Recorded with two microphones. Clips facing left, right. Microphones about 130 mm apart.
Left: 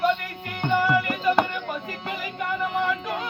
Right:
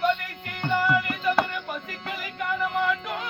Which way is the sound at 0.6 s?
20° left (ahead or behind).